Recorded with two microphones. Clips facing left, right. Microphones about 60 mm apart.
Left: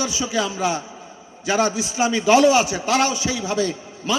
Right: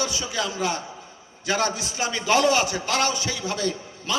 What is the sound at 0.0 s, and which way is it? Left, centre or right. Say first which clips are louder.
A man's voice: left 4 dB; centre.